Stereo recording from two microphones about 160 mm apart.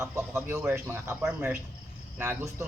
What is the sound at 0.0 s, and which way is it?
A man's voice, 15° right (ahead or behind).